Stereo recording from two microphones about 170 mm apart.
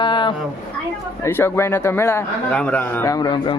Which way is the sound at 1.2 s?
15° left (ahead or behind).